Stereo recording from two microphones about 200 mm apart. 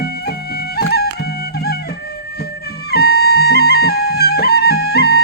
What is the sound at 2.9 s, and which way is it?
Music, 50° left (ahead or behind).